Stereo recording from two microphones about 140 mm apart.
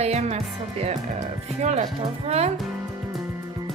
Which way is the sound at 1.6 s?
55° right (ahead or behind).